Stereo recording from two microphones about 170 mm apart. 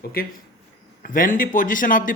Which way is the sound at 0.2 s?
60° left (ahead or behind).